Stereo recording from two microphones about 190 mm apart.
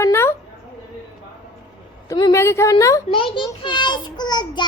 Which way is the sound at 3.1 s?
25° left (ahead or behind).